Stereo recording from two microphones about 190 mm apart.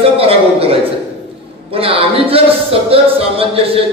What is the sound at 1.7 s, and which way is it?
Speech, 30° right (ahead or behind).